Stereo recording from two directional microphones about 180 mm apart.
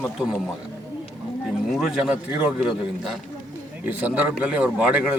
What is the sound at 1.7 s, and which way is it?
Speech, centre (ahead or behind).